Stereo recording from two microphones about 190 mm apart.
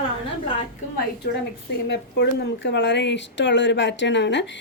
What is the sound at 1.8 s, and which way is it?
A woman's voice, 65° left (ahead or behind).